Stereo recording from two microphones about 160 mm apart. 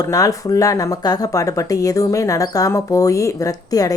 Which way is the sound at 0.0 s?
20° left (ahead or behind).